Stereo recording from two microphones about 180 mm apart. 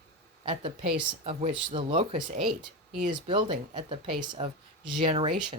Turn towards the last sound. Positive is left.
turn(degrees=-30)  # may be behind; listen again after turning